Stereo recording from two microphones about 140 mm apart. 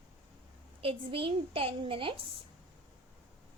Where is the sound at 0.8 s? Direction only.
40° right (ahead or behind).